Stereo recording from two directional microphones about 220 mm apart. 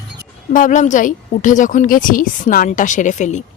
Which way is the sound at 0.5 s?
35° left (ahead or behind).